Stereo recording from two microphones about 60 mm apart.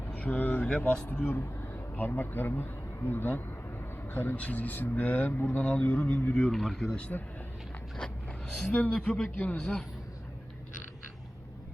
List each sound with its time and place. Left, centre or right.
0.2 s speech: left
8.5 s speech: centre
9.4 s speech: left